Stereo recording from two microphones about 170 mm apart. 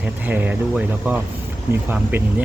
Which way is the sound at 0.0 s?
10° right (ahead or behind).